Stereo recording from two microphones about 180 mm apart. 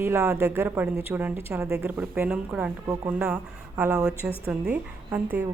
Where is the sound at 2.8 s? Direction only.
15° right (ahead or behind).